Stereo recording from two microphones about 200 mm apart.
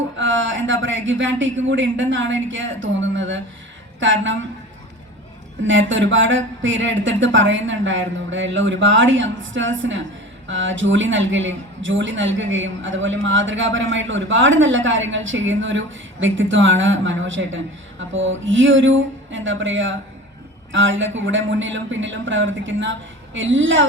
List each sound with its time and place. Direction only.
0.2 s a woman's voice: 70° right (ahead or behind)
5.6 s a woman's voice: 70° right (ahead or behind)